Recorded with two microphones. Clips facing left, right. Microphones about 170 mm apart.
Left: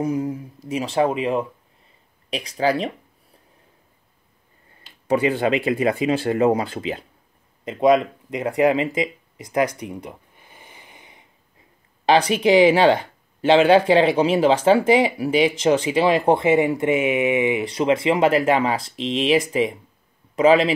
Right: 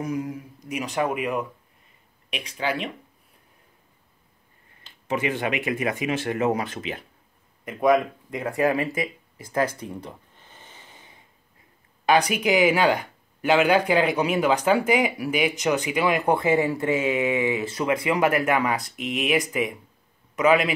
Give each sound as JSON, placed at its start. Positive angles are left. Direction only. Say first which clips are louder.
{"t": 0.0, "sound": "speech", "louder": "left 5 dB", "side_deg": 30}
{"t": 5.0, "sound": "speech", "louder": "left 6 dB", "side_deg": 35}
{"t": 12.1, "sound": "speech", "louder": "left 4 dB", "side_deg": 30}